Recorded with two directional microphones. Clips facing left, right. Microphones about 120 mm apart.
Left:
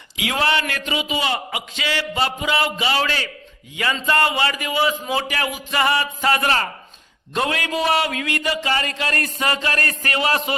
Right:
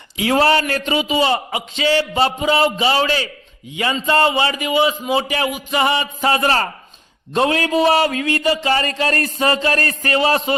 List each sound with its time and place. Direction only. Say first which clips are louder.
0.2 s a man's voice: right 6 dB; 35° right (ahead or behind)